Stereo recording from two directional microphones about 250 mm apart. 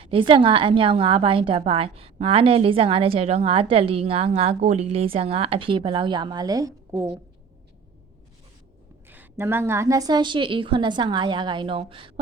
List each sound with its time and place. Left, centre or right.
0.0 s a woman's voice: right
9.0 s a woman's voice: centre